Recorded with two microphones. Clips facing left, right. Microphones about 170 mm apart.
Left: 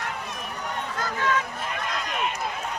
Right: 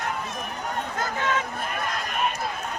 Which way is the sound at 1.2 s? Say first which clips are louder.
Left 2 dB; 25° right (ahead or behind).